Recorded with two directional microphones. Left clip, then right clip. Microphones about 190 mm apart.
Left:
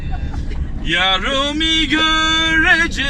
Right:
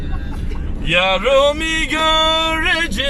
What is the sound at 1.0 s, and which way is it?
Music, 20° right (ahead or behind).